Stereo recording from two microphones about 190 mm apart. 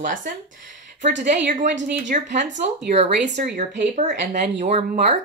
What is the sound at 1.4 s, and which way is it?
Speech, 40° right (ahead or behind).